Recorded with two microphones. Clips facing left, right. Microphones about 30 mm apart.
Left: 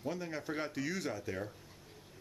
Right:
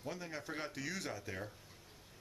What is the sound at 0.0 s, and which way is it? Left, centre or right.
Speech, centre.